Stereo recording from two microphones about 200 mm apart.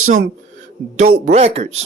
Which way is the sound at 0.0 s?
40° right (ahead or behind).